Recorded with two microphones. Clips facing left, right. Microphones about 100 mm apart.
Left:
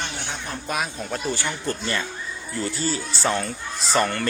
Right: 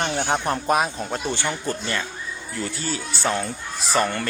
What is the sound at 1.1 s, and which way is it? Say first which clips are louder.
Speech: right 1 dB; 20° right (ahead or behind).